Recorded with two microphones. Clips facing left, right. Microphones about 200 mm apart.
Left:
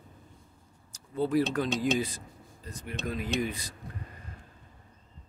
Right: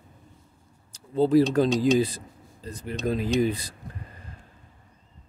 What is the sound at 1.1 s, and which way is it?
Speech, 30° right (ahead or behind).